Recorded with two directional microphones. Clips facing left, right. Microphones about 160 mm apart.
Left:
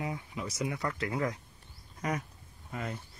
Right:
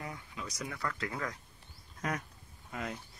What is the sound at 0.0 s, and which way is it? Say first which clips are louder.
Speech: left 6 dB; 20° left (ahead or behind).